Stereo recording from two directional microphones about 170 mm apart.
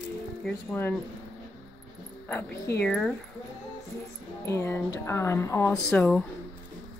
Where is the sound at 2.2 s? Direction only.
10° left (ahead or behind).